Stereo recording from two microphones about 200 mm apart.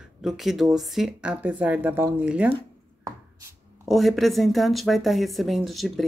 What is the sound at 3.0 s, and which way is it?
Chopping, 15° right (ahead or behind).